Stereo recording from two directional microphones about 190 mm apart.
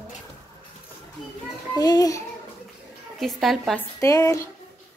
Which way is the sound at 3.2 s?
Centre (ahead or behind).